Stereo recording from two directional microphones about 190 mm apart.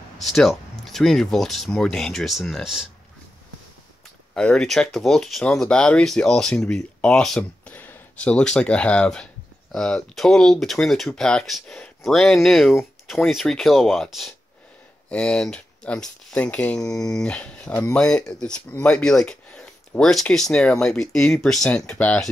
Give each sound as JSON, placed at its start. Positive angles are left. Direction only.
{"t": 0.2, "sound": "speech", "side_deg": 0}
{"t": 4.3, "sound": "speech", "side_deg": 5}
{"t": 16.8, "sound": "speech", "side_deg": 20}
{"t": 17.1, "sound": "speech", "side_deg": 5}